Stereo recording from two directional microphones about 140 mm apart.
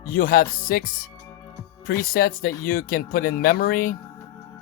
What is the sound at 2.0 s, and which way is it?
Speech, 90° left.